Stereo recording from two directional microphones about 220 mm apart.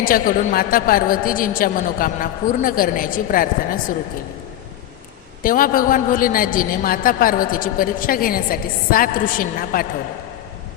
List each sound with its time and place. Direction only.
0.0 s a woman's voice: 40° left (ahead or behind)
5.4 s a woman's voice: 40° left (ahead or behind)